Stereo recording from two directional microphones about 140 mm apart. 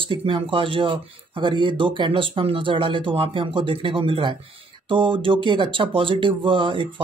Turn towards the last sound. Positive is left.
turn(degrees=-35)  # may be behind; listen again after turning